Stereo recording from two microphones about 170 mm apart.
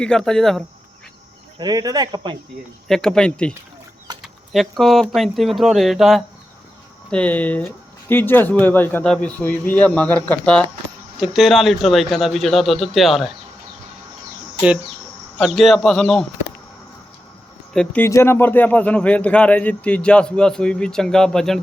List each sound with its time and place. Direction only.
0.0 s a man's voice: 5° left (ahead or behind)
1.5 s speech: 25° right (ahead or behind)
2.8 s a man's voice: 5° left (ahead or behind)
15.4 s a man's voice: centre (ahead or behind)
17.7 s speech: 10° left (ahead or behind)